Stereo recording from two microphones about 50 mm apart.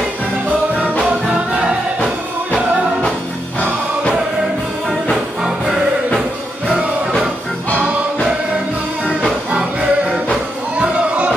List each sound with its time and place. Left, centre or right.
1.2 s music: centre
5.1 s music: centre
9.0 s music: centre
10.8 s a sound: right